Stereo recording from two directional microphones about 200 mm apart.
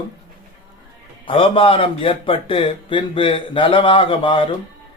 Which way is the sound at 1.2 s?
25° left (ahead or behind).